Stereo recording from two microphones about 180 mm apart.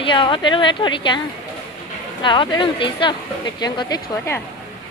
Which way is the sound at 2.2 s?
25° left (ahead or behind).